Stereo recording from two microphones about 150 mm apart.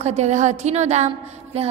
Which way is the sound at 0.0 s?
45° right (ahead or behind).